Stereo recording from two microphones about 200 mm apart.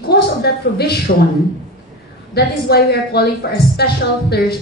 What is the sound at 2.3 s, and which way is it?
A woman's voice, 55° left (ahead or behind).